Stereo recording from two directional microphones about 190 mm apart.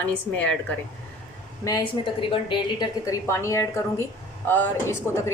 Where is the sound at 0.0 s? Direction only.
10° left (ahead or behind).